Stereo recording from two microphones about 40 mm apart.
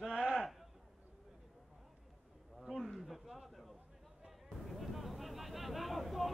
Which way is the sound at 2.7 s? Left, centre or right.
Centre.